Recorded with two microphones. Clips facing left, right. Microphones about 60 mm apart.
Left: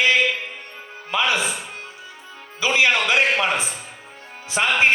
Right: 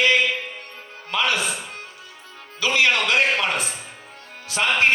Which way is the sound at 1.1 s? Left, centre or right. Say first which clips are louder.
Left 1 dB; centre.